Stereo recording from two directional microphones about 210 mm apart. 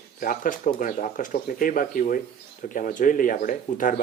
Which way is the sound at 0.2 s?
40° left (ahead or behind).